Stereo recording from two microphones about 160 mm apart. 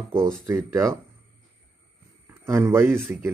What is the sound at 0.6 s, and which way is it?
Speech, 15° right (ahead or behind).